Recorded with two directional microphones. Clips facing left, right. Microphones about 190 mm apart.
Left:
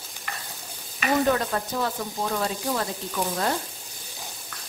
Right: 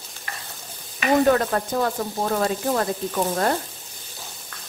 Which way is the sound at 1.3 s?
55° right (ahead or behind).